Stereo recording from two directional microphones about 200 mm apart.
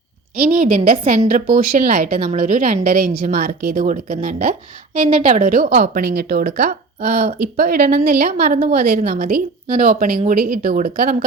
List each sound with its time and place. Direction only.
0.3 s a woman's voice: 45° right (ahead or behind)